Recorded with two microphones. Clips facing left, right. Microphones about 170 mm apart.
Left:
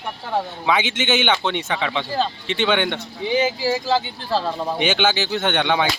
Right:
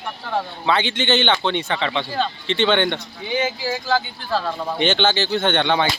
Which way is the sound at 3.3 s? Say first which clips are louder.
Left 3 dB; 30° left (ahead or behind).